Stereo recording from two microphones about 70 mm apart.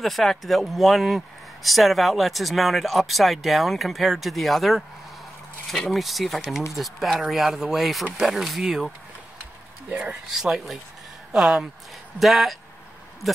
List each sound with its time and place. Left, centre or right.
0.0 s speech: centre
9.8 s speech: right
10.3 s speech: centre